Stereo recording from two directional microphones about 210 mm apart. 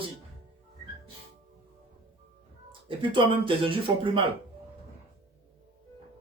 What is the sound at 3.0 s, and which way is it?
Speech, 25° right (ahead or behind).